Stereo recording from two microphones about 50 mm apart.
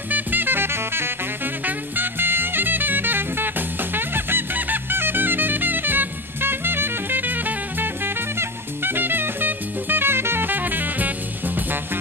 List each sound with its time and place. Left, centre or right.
0.1 s music: right